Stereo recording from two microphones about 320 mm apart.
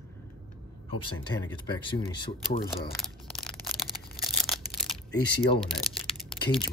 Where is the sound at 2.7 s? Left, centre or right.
Centre.